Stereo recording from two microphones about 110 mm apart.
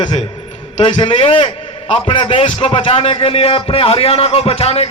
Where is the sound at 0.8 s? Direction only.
50° left (ahead or behind).